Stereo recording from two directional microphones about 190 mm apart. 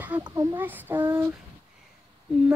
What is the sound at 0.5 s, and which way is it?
Speech, 10° right (ahead or behind).